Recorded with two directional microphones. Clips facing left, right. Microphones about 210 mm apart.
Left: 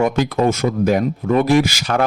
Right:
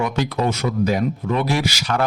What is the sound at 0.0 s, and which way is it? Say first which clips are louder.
Speech: left 5 dB; 50° left (ahead or behind).